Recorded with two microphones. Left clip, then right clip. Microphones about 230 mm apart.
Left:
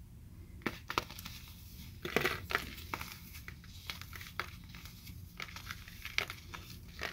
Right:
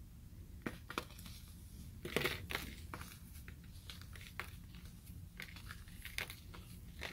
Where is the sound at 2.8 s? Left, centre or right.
Centre.